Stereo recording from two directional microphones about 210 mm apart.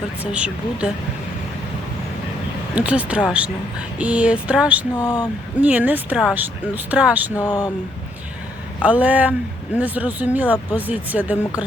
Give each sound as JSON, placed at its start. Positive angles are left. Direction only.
{"t": 0.2, "sound": "speech", "side_deg": -5}
{"t": 2.7, "sound": "speech", "side_deg": -5}
{"t": 4.9, "sound": "speech", "side_deg": 20}
{"t": 5.6, "sound": "speech", "side_deg": -5}
{"t": 7.3, "sound": "speech", "side_deg": 20}
{"t": 8.8, "sound": "speech", "side_deg": -5}